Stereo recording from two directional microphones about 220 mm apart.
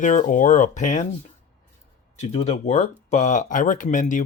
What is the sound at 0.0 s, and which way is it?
Speech, 35° left (ahead or behind).